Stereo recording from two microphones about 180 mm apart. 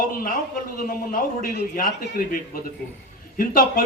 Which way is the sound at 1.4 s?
50° left (ahead or behind).